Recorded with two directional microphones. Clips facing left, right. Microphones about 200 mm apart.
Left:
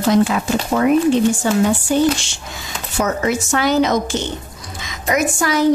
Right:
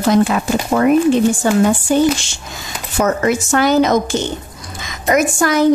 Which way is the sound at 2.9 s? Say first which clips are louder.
Right 3 dB; 50° right (ahead or behind).